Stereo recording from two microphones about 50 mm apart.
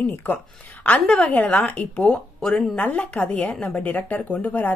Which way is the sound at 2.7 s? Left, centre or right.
Left.